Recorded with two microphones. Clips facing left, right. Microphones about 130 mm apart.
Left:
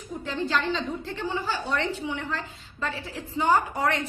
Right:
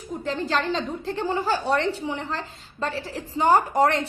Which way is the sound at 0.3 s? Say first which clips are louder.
Right 2 dB; 40° right (ahead or behind).